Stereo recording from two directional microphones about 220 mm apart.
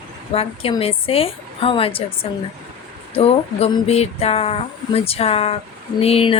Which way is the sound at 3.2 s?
25° left (ahead or behind).